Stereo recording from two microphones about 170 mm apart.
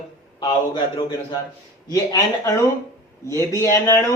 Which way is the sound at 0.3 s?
25° left (ahead or behind).